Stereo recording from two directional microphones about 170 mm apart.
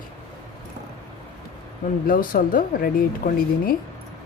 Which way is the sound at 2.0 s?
55° left (ahead or behind).